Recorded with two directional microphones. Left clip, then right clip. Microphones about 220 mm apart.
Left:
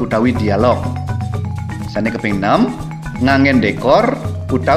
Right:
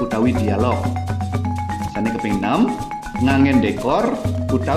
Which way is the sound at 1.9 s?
30° left (ahead or behind).